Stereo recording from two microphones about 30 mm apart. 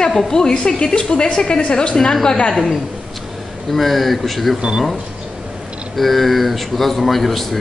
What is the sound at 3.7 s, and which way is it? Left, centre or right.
Speech, centre.